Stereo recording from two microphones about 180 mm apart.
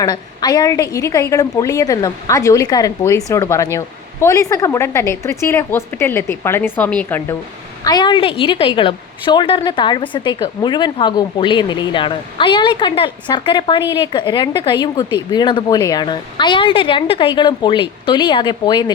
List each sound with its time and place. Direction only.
0.0 s a woman's voice: 20° left (ahead or behind)
7.9 s a woman's voice: 25° left (ahead or behind)